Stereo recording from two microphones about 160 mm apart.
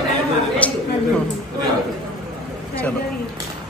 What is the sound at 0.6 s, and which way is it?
Speech, 10° left (ahead or behind).